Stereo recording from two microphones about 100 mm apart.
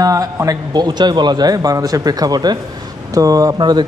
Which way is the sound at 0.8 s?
45° right (ahead or behind).